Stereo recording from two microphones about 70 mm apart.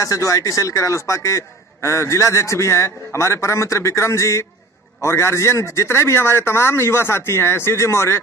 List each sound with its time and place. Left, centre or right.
0.0 s a man's voice: left